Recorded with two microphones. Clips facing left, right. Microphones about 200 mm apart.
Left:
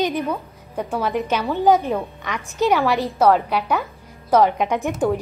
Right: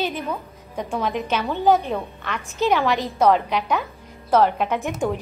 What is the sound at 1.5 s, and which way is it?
A woman's voice, 15° left (ahead or behind).